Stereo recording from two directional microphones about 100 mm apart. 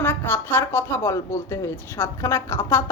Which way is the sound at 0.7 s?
25° left (ahead or behind).